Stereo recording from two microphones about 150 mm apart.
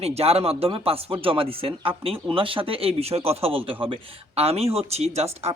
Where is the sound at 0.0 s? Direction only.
45° right (ahead or behind).